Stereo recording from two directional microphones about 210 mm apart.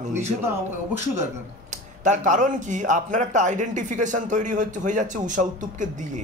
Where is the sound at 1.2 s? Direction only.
35° right (ahead or behind).